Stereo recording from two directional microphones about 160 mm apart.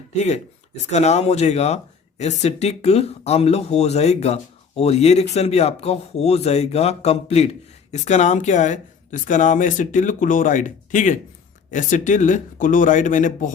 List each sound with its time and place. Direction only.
0.9 s speech: 45° left (ahead or behind)